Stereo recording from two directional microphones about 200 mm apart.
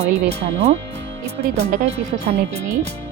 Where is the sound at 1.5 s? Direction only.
35° right (ahead or behind).